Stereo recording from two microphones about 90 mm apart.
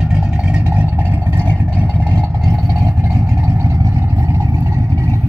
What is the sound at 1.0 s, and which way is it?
Vehicle, 25° right (ahead or behind).